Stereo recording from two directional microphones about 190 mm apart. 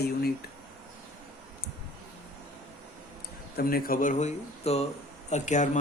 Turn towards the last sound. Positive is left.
turn(degrees=40)  # may be behind; listen again after turning